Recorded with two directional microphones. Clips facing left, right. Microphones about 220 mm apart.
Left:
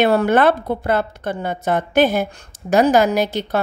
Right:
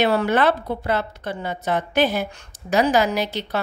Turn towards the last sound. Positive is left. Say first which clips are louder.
# left 5 dB
turn(degrees=50)  # may be behind; listen again after turning